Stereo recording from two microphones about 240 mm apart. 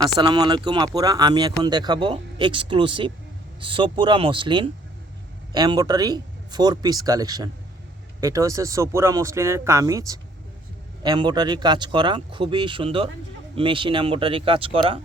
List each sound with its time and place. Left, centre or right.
0.0 s speech: centre